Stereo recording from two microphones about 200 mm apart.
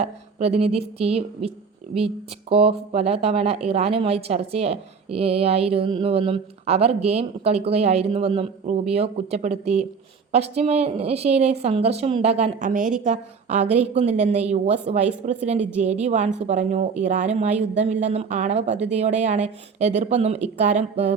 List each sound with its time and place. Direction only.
0.0 s a woman's voice: 30° right (ahead or behind)